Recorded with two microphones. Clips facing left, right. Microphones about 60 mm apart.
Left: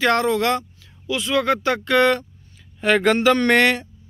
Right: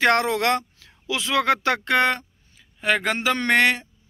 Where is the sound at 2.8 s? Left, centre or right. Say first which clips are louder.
Left 6 dB; centre.